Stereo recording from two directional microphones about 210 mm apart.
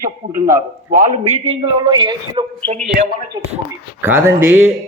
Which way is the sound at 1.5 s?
25° right (ahead or behind).